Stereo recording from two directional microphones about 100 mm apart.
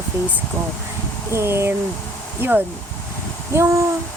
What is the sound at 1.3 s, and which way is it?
Speech, 25° right (ahead or behind).